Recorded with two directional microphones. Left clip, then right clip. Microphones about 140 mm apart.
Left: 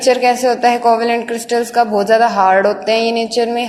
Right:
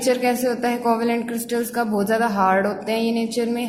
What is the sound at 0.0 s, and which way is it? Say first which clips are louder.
A woman's voice: left 8 dB; 20° left (ahead or behind).